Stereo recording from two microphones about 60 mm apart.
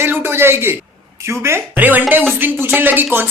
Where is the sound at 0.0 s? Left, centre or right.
Right.